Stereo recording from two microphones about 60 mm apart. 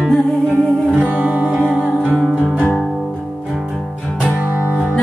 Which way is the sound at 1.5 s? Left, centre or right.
Left.